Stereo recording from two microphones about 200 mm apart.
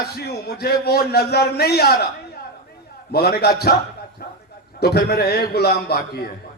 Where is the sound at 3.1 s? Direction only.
55° left (ahead or behind).